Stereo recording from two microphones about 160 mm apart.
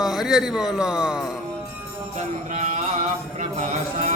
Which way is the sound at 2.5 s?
50° right (ahead or behind).